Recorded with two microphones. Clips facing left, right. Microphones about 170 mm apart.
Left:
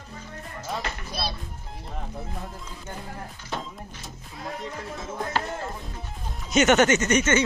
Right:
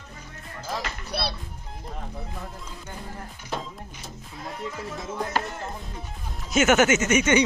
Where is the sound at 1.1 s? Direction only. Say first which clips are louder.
Right 3 dB; 70° right (ahead or behind).